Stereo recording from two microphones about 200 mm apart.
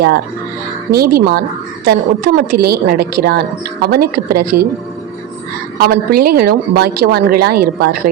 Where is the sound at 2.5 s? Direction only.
50° right (ahead or behind).